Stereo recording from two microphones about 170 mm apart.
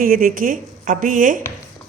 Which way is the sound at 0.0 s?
55° right (ahead or behind).